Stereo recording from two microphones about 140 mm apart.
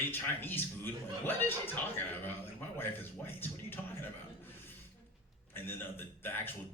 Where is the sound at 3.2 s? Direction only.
15° left (ahead or behind).